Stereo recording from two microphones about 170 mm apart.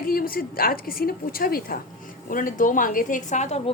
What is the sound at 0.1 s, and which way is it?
A woman's voice, 60° left (ahead or behind).